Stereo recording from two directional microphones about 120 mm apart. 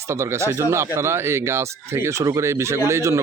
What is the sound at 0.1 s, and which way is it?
Speech, 20° right (ahead or behind).